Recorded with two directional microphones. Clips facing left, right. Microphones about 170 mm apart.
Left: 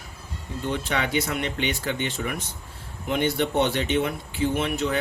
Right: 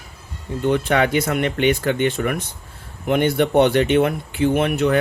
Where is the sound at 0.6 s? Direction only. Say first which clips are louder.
Right 9 dB; 60° right (ahead or behind).